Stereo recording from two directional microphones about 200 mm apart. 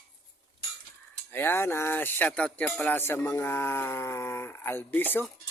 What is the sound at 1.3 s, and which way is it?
Speech, 10° left (ahead or behind).